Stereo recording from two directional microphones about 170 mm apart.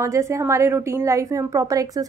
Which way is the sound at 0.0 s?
15° right (ahead or behind).